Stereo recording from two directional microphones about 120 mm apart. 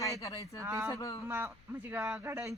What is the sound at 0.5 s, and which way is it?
Speech, 25° right (ahead or behind).